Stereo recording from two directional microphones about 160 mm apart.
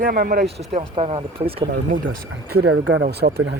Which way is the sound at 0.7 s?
35° right (ahead or behind).